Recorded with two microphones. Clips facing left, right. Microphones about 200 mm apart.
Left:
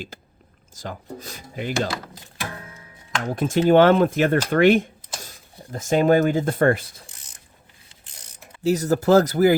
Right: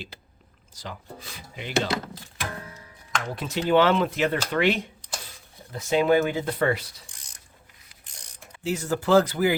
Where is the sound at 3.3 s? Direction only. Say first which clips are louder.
Left 6 dB; 50° left (ahead or behind).